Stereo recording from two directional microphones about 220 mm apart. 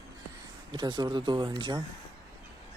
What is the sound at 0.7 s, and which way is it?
Speech, 20° right (ahead or behind).